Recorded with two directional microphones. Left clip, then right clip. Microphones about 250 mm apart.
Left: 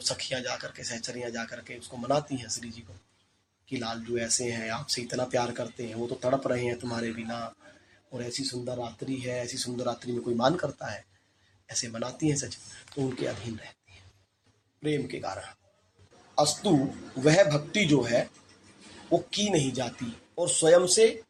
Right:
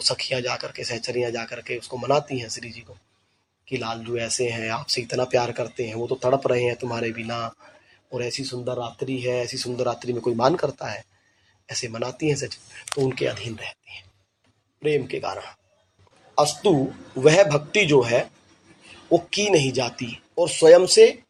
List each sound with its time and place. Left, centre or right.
0.0 s speech: centre
14.8 s speech: right
16.3 s speech: right
19.3 s speech: right